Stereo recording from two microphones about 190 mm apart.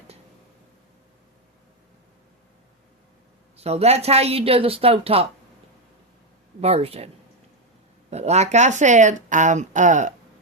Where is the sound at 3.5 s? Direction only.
35° right (ahead or behind).